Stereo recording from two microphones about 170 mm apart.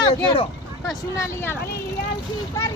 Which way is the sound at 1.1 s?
15° left (ahead or behind).